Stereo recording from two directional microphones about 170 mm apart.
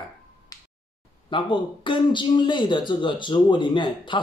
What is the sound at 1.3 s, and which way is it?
A man's voice, 30° left (ahead or behind).